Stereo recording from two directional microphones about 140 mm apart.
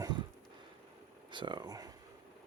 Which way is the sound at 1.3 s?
35° right (ahead or behind).